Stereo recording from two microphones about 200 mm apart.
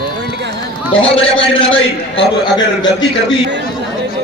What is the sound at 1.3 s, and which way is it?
A man's voice, 25° left (ahead or behind).